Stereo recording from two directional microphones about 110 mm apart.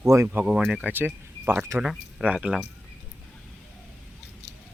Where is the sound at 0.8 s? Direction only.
15° right (ahead or behind).